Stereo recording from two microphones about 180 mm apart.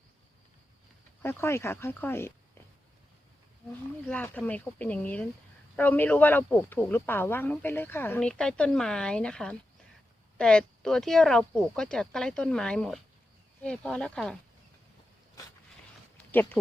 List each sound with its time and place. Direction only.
1.2 s speech: 15° left (ahead or behind)
4.1 s speech: 10° left (ahead or behind)
16.1 s a sound: 10° left (ahead or behind)